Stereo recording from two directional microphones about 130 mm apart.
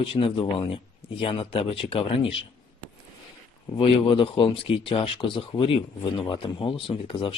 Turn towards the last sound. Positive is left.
turn(degrees=45)  # may be behind; listen again after turning